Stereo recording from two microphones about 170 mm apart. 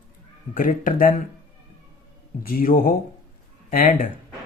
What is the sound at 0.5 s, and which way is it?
Speech, 50° left (ahead or behind).